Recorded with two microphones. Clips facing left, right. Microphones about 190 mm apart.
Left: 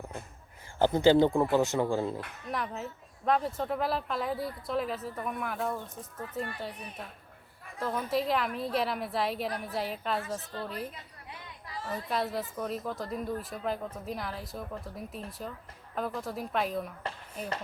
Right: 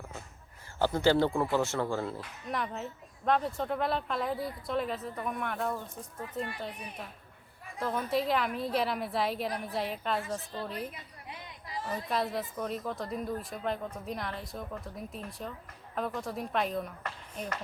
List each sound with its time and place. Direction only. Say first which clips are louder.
0.8 s speech: left 4 dB; 20° left (ahead or behind)
2.5 s speech: even; centre (ahead or behind)
7.8 s a woman's voice: even; centre (ahead or behind)
12.0 s speech: left 1 dB; centre (ahead or behind)